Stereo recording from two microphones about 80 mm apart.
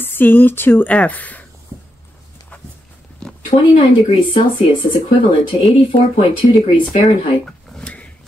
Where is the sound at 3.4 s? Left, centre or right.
Left.